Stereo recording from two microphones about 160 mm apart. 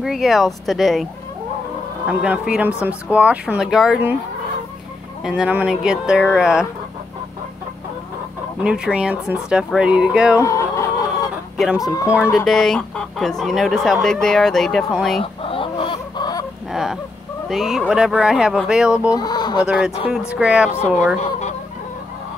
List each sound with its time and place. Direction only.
0.0 s speech: centre (ahead or behind)
2.0 s speech: 5° right (ahead or behind)
5.2 s speech: 10° right (ahead or behind)
8.6 s speech: 5° right (ahead or behind)
10.4 s chicken: 20° left (ahead or behind)
11.5 s speech: centre (ahead or behind)
11.8 s speech: 20° left (ahead or behind)
12.1 s speech: 10° right (ahead or behind)
12.4 s speech: centre (ahead or behind)
15.4 s chicken: 35° left (ahead or behind)
16.7 s a sound: centre (ahead or behind)
17.5 s speech: centre (ahead or behind)
19.0 s speech: 25° left (ahead or behind)
19.6 s speech: 5° right (ahead or behind)